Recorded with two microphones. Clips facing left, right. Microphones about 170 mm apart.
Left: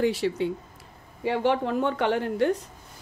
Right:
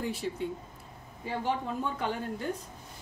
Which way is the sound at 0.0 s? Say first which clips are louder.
Left 9 dB; 80° left.